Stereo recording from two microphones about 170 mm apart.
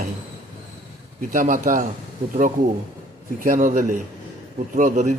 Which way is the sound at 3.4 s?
50° right (ahead or behind).